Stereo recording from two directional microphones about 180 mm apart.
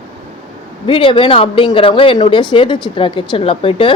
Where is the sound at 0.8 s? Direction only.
30° left (ahead or behind).